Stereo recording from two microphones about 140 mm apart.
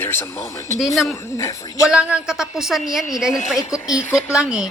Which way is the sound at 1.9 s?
10° right (ahead or behind).